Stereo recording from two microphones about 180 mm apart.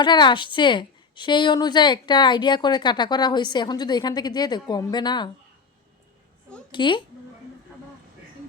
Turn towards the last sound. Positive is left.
turn(degrees=25)  # may be behind; listen again after turning